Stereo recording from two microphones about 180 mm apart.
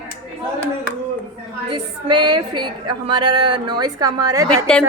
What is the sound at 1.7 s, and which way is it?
A woman's voice, 25° right (ahead or behind).